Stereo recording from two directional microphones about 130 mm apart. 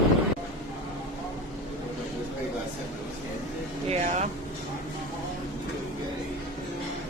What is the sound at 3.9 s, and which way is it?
Vehicle, 65° right (ahead or behind).